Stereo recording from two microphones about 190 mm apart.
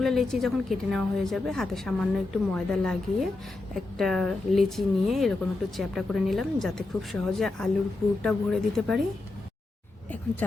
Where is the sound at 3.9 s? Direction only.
Centre (ahead or behind).